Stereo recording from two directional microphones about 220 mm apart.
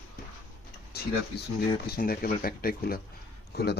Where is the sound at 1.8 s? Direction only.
45° left (ahead or behind).